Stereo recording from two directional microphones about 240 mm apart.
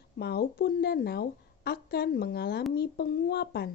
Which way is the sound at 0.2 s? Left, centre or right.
Left.